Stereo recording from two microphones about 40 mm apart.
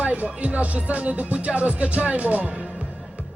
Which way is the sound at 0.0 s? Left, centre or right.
Right.